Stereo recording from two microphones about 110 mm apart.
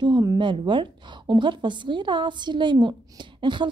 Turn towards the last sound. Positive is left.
turn(degrees=-45)  # may be behind; listen again after turning